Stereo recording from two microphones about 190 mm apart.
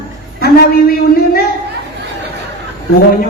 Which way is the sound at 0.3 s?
55° left (ahead or behind).